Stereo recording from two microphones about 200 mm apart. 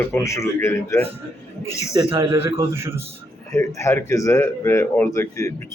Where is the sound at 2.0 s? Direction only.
25° right (ahead or behind).